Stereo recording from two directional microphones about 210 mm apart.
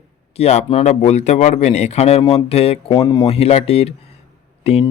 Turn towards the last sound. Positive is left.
turn(degrees=30)  # may be behind; listen again after turning